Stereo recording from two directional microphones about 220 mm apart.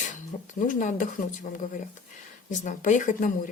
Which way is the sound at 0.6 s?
35° left (ahead or behind).